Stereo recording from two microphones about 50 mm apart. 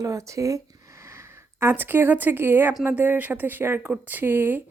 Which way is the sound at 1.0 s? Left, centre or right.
Right.